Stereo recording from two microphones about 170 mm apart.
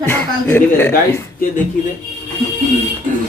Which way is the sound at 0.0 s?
15° left (ahead or behind).